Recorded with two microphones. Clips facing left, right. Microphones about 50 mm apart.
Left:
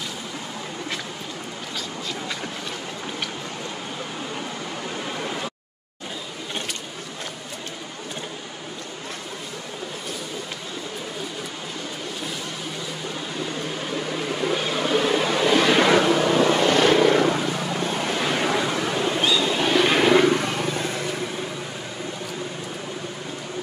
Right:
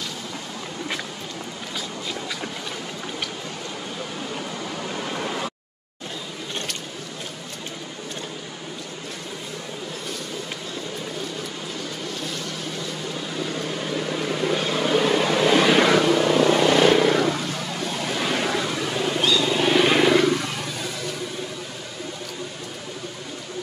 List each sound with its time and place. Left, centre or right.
5.0 s a sound: centre
13.8 s vehicle: centre
18.2 s wild animals: centre
20.2 s wild animals: left